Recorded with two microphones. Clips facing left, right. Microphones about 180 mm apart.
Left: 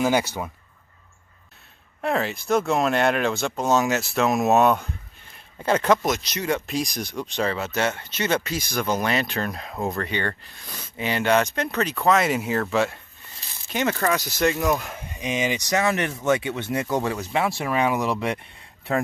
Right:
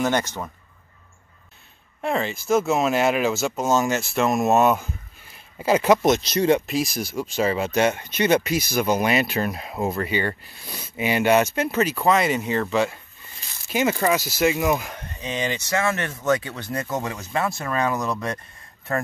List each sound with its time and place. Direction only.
0.0 s speech: 10° left (ahead or behind)
2.0 s speech: centre (ahead or behind)
6.0 s speech: 30° right (ahead or behind)
6.6 s speech: 5° right (ahead or behind); by 18.4 s 10° left (ahead or behind)